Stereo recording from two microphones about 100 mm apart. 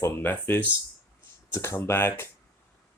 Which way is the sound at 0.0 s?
20° left (ahead or behind).